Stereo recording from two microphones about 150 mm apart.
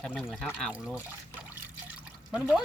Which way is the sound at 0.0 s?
Centre (ahead or behind).